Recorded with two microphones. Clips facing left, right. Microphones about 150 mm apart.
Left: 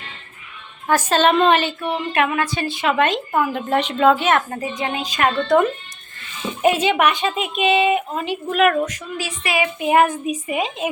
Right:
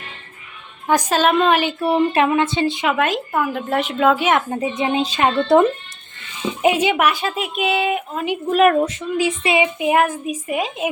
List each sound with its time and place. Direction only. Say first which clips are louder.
0.9 s a woman's voice: even; 15° right (ahead or behind)
1.8 s a sound: right 5 dB; 35° right (ahead or behind)
2.2 s speech: right 4 dB; 25° right (ahead or behind)
3.3 s a woman's voice: left 1 dB; centre (ahead or behind); by 5.6 s 30° right (ahead or behind)
6.6 s speech: even; 15° right (ahead or behind)
8.5 s speech: right 3 dB; 35° right (ahead or behind)
9.7 s speech: left 1 dB; 5° right (ahead or behind)